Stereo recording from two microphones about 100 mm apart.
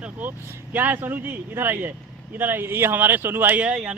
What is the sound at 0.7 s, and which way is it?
Speech, 20° right (ahead or behind).